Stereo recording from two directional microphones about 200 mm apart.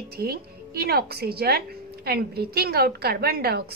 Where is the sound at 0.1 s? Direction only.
50° right (ahead or behind).